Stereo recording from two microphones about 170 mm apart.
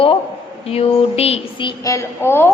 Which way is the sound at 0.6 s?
35° left (ahead or behind).